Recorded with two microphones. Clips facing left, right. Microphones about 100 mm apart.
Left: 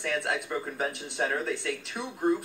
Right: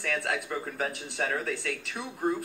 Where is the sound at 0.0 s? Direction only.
20° left (ahead or behind).